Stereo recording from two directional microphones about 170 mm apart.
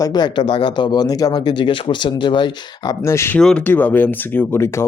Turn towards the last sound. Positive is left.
turn(degrees=15)  # may be behind; listen again after turning